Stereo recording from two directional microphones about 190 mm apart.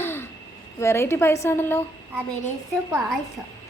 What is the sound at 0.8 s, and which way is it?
A child's voice, 15° left (ahead or behind).